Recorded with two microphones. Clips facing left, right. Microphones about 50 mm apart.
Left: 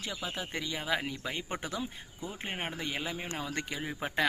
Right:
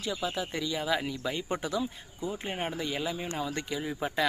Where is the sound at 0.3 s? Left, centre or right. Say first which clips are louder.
Right 4 dB; left.